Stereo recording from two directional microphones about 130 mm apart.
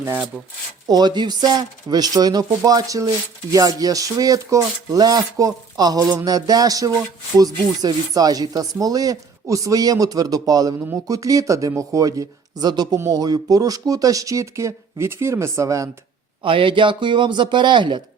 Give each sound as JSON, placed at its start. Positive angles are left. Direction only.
{"t": 0.0, "sound": "speech", "side_deg": -15}
{"t": 0.9, "sound": "speech", "side_deg": -35}
{"t": 3.5, "sound": "rub", "side_deg": -30}
{"t": 16.4, "sound": "speech", "side_deg": -40}